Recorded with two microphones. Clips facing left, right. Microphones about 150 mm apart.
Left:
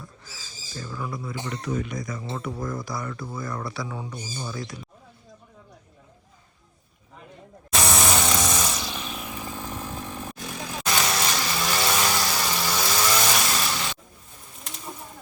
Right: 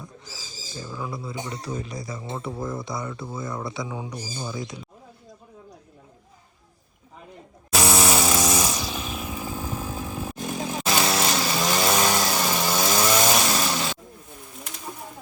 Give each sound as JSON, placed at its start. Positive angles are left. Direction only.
{"t": 0.0, "sound": "owl", "side_deg": -15}
{"t": 1.6, "sound": "speech", "side_deg": -30}
{"t": 7.7, "sound": "chainsaw", "side_deg": -5}
{"t": 10.4, "sound": "vehicle", "side_deg": -25}